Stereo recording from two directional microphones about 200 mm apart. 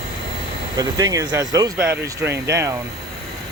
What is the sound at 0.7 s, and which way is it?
Speech, 15° right (ahead or behind).